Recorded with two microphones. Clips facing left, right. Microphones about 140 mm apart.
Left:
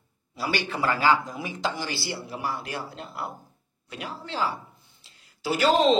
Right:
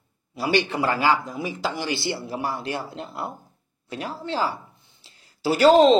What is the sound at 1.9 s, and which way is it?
Speech, 25° right (ahead or behind).